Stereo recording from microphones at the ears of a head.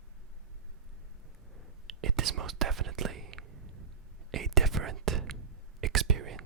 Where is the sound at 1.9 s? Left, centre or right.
Right.